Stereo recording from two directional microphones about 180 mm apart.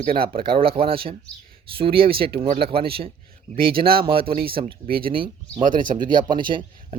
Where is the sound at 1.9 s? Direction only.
55° right (ahead or behind).